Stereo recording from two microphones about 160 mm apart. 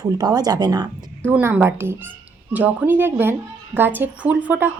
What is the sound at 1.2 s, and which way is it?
A woman's voice, 15° right (ahead or behind).